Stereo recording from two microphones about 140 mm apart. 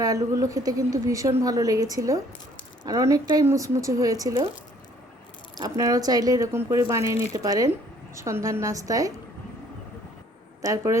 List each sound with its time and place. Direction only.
0.0 s a woman's voice: 25° right (ahead or behind)
5.5 s a woman's voice: 25° right (ahead or behind)
10.6 s a woman's voice: 25° right (ahead or behind)